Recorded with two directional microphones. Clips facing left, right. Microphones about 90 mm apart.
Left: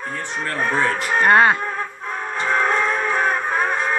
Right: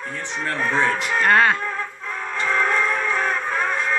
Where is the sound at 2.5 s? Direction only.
20° left (ahead or behind).